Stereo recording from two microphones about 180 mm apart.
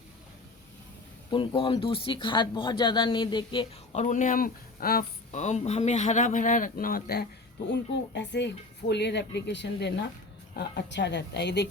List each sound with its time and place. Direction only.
1.3 s speech: 30° left (ahead or behind)
4.0 s speech: 45° left (ahead or behind)
7.7 s speech: 75° left (ahead or behind)